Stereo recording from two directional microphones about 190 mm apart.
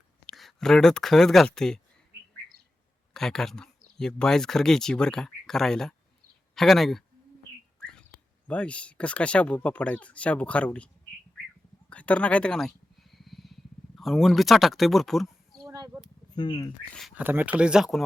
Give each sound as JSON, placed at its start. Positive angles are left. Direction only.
{"t": 0.3, "sound": "speech", "side_deg": 0}
{"t": 3.1, "sound": "speech", "side_deg": 0}
{"t": 8.4, "sound": "speech", "side_deg": 5}
{"t": 11.9, "sound": "a sound", "side_deg": 5}
{"t": 15.6, "sound": "a sound", "side_deg": -20}
{"t": 16.3, "sound": "speech", "side_deg": 25}
{"t": 16.9, "sound": "speech", "side_deg": 0}